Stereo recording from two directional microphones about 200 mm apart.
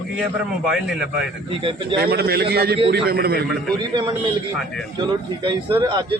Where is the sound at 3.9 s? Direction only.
25° right (ahead or behind).